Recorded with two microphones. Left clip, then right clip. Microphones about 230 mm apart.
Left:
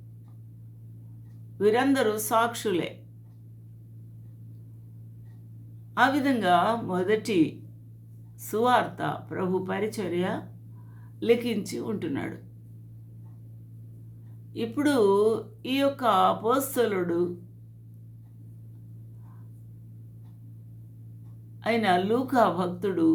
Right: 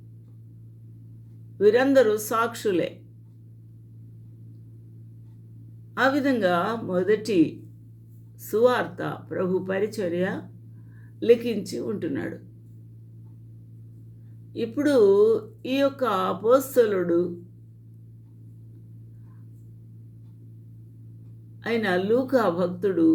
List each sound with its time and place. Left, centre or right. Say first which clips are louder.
1.5 s speech: right 5 dB; centre
5.9 s speech: right 1 dB; centre
14.5 s speech: right 4 dB; centre
21.6 s speech: left 1 dB; centre